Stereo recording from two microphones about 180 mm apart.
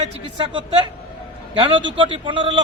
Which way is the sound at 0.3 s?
25° right (ahead or behind).